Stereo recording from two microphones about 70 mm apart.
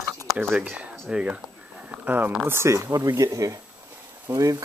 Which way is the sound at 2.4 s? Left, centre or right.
Right.